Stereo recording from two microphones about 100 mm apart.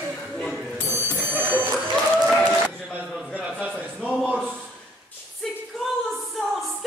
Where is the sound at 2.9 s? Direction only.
15° right (ahead or behind).